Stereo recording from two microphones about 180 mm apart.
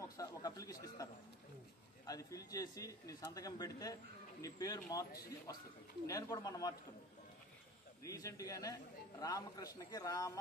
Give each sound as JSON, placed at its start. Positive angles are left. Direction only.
{"t": 0.2, "sound": "speech", "side_deg": 20}
{"t": 2.0, "sound": "speech", "side_deg": 20}
{"t": 8.0, "sound": "speech", "side_deg": 20}